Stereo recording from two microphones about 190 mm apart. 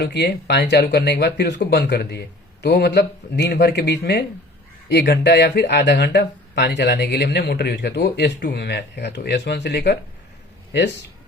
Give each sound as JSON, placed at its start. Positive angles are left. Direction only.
{"t": 0.0, "sound": "speech", "side_deg": 65}